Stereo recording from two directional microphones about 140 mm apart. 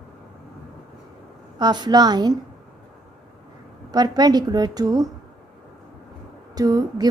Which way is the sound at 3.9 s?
30° right (ahead or behind).